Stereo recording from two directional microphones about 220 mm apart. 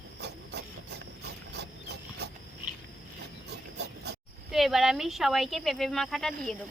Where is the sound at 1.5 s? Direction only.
50° right (ahead or behind).